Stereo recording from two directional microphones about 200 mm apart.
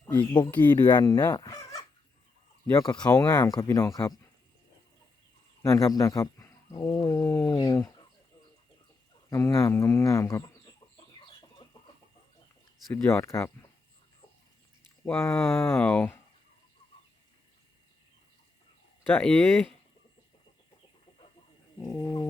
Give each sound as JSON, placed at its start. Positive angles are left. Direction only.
{"t": 0.1, "sound": "speech", "side_deg": 10}
{"t": 0.9, "sound": "chicken", "side_deg": 15}
{"t": 2.6, "sound": "speech", "side_deg": 20}
{"t": 5.6, "sound": "speech", "side_deg": 15}
{"t": 9.3, "sound": "speech", "side_deg": 15}
{"t": 11.3, "sound": "chicken", "side_deg": 25}
{"t": 12.9, "sound": "speech", "side_deg": 10}
{"t": 15.0, "sound": "speech", "side_deg": 10}
{"t": 19.1, "sound": "speech", "side_deg": 5}
{"t": 21.8, "sound": "bird", "side_deg": 20}